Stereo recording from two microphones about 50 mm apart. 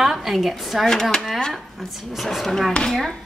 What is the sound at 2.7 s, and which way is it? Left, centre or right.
Speech, centre.